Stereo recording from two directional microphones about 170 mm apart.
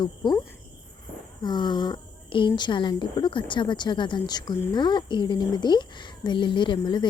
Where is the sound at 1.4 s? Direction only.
25° left (ahead or behind).